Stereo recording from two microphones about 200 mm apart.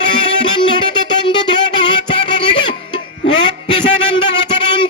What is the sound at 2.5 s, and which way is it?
Music, 25° left (ahead or behind).